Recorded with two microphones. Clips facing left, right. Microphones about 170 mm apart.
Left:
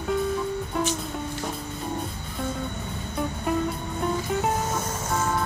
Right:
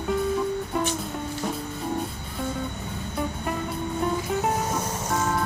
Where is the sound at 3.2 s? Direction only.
5° right (ahead or behind).